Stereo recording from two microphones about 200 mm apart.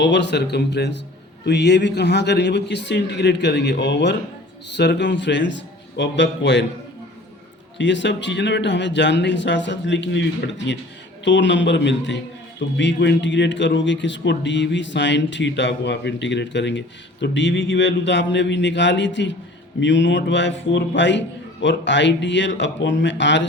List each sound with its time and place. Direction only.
0.0 s a man's voice: 60° left (ahead or behind)
7.8 s a man's voice: 65° left (ahead or behind)